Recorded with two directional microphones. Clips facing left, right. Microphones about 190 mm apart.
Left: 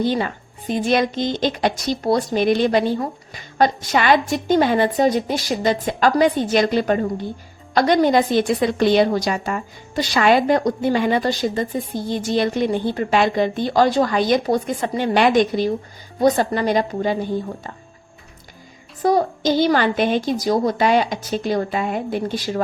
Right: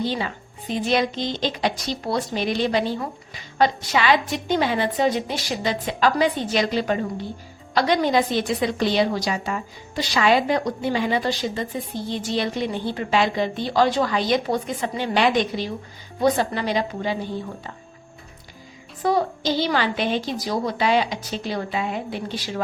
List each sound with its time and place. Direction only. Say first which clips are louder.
0.0 s a woman's voice: left 5 dB; 50° left (ahead or behind)
19.0 s a woman's voice: left 4 dB; 45° left (ahead or behind)